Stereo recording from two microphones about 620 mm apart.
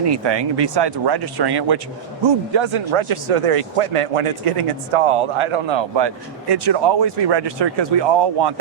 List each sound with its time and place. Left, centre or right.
0.0 s speech: right